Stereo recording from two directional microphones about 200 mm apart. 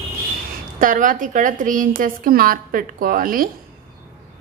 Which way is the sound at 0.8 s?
40° right (ahead or behind).